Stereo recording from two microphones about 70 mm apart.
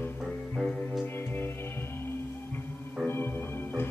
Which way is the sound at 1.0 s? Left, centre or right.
Left.